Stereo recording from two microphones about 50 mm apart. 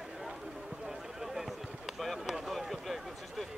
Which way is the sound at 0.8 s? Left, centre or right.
Centre.